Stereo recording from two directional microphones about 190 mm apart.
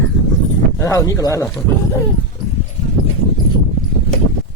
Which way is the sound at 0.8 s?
15° left (ahead or behind).